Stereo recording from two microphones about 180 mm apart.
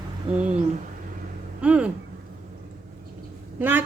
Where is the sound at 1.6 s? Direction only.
5° right (ahead or behind).